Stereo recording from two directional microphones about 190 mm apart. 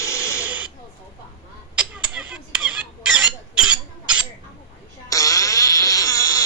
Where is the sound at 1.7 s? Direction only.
5° right (ahead or behind).